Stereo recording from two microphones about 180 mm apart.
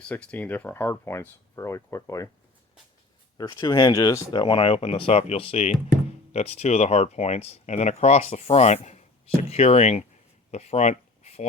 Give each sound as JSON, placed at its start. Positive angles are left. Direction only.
{"t": 0.0, "sound": "speech", "side_deg": 5}
{"t": 3.3, "sound": "speech", "side_deg": 20}
{"t": 10.5, "sound": "a sound", "side_deg": 40}